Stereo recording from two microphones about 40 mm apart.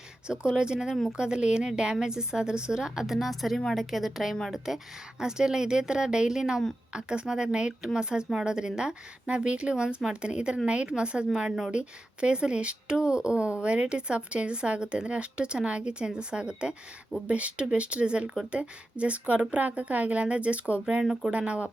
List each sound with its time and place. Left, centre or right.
0.3 s a woman's voice: right